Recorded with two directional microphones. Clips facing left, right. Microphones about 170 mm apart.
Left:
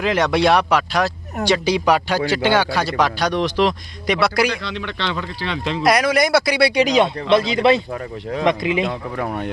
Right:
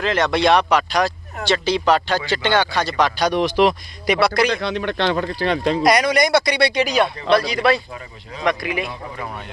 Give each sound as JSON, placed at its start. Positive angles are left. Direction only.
{"t": 0.0, "sound": "speech", "side_deg": 10}
{"t": 3.3, "sound": "speech", "side_deg": -10}
{"t": 4.6, "sound": "speech", "side_deg": -50}
{"t": 5.8, "sound": "speech", "side_deg": 5}
{"t": 6.8, "sound": "speech", "side_deg": 20}
{"t": 8.9, "sound": "speech", "side_deg": 55}